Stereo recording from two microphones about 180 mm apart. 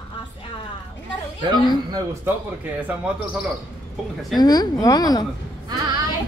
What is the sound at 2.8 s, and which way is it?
Speech, 5° right (ahead or behind).